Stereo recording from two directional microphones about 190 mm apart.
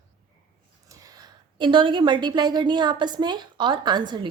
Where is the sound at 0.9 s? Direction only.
20° right (ahead or behind).